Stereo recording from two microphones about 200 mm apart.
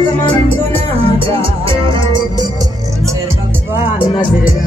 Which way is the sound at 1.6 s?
20° right (ahead or behind).